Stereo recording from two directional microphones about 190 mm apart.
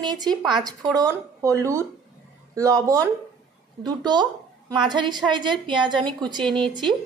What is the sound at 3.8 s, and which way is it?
A woman's voice, 20° right (ahead or behind).